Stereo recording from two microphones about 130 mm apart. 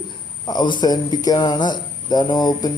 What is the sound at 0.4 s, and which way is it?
Speech, 35° left (ahead or behind).